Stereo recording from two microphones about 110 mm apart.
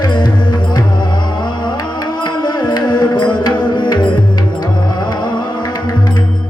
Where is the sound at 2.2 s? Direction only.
40° left (ahead or behind).